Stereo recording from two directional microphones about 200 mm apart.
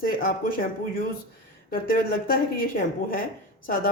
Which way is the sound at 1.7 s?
45° left (ahead or behind).